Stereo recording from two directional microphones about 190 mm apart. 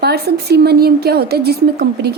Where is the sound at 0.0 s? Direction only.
55° right (ahead or behind).